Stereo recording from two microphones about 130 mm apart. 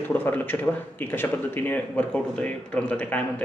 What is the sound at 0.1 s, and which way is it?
Speech, 15° left (ahead or behind).